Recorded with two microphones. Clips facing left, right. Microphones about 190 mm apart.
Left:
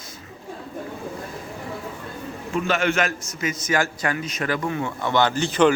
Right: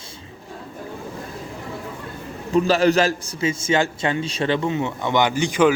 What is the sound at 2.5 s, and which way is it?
Speech, 35° right (ahead or behind).